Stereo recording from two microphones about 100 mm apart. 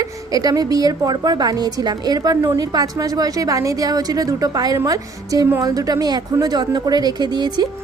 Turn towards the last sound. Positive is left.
turn(degrees=-45)  # may be behind; listen again after turning